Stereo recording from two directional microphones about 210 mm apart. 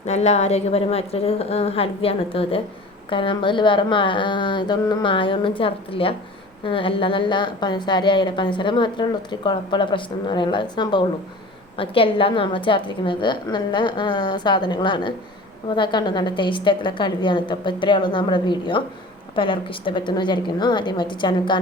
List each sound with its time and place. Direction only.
0.0 s a woman's voice: 30° left (ahead or behind)